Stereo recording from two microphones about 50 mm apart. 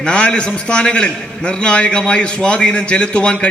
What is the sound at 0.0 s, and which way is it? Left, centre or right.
A man's voice, left.